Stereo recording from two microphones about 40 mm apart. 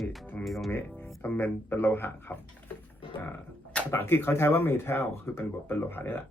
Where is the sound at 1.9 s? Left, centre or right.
Left.